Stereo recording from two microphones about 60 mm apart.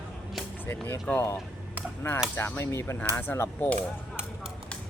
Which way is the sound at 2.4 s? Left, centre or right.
Left.